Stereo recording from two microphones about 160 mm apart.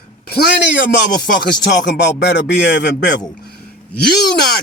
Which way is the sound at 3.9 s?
90° left.